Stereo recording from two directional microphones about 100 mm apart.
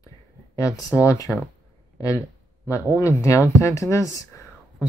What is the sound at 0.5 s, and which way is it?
Speech, 35° left (ahead or behind).